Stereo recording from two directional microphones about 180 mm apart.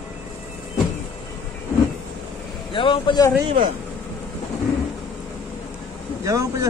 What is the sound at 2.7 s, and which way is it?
Speech, 30° left (ahead or behind).